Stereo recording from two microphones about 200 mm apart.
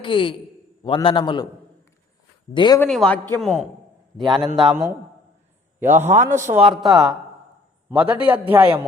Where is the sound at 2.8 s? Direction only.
5° left (ahead or behind).